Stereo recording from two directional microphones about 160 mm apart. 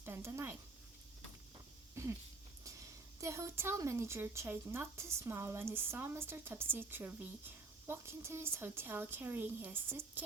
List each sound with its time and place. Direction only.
0.0 s speech: 15° right (ahead or behind)
2.0 s a sound: 15° right (ahead or behind)
2.6 s a woman's voice: 20° right (ahead or behind)